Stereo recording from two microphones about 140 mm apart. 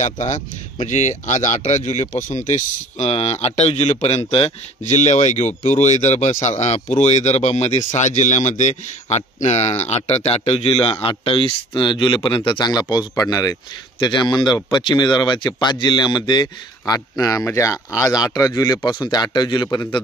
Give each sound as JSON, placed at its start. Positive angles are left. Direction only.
{"t": 0.0, "sound": "a man's voice", "side_deg": 55}